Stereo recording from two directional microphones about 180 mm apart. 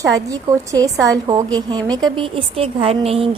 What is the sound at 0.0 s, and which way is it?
A woman's voice, 20° right (ahead or behind).